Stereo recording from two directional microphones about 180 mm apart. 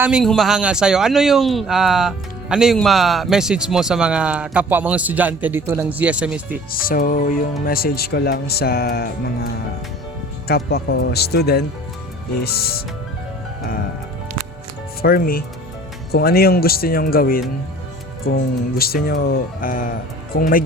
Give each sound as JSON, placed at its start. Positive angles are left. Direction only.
{"t": 0.0, "sound": "speech", "side_deg": -5}
{"t": 6.7, "sound": "speech", "side_deg": 55}
{"t": 10.5, "sound": "speech", "side_deg": 60}
{"t": 15.0, "sound": "speech", "side_deg": 55}